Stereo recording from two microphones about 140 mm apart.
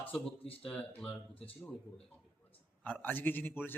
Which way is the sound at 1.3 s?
40° left (ahead or behind).